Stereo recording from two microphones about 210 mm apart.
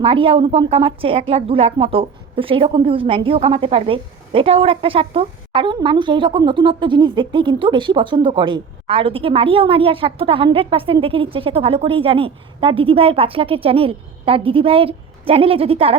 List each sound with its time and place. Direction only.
0.0 s a woman's voice: 25° right (ahead or behind)